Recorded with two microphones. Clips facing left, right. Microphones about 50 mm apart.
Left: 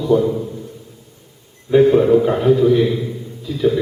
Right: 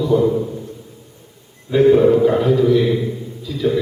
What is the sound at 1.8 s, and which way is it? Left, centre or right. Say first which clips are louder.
A man's voice: even; centre.